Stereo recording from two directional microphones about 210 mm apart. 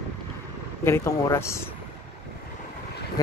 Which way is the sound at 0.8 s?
15° left (ahead or behind).